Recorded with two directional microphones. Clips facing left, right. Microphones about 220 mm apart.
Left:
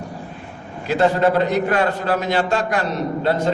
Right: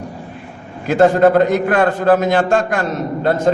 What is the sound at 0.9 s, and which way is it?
A man's voice, 50° right (ahead or behind).